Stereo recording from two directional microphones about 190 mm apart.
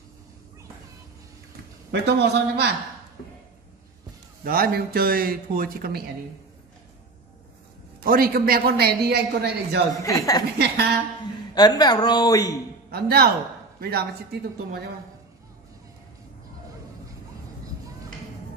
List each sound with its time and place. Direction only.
1.9 s speech: 65° right (ahead or behind)
4.5 s a woman's voice: 50° right (ahead or behind)
8.0 s a woman's voice: 50° right (ahead or behind)
10.0 s a woman's voice: 15° left (ahead or behind)
11.5 s speech: 20° left (ahead or behind)
12.9 s a woman's voice: 55° right (ahead or behind)